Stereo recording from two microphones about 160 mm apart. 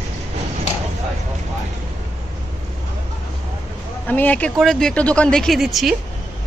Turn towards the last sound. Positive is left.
turn(degrees=0)  # may be behind; listen again after turning